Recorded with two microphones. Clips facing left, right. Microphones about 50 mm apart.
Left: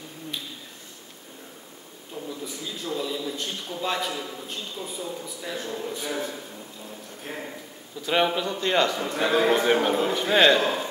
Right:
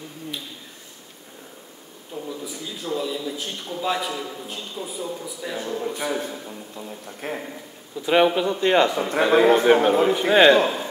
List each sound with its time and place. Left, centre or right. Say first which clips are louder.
2.4 s a man's voice: right 2 dB; centre
5.7 s a man's voice: right 7 dB; right
7.2 s speech: right 7 dB; right
8.0 s speech: right 5 dB; centre